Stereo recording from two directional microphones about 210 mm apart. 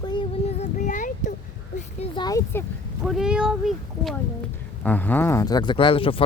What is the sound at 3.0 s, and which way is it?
Speech, centre (ahead or behind).